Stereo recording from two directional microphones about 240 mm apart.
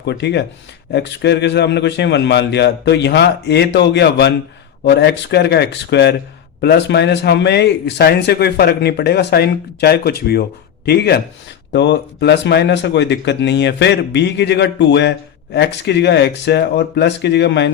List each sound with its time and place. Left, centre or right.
0.0 s speech: left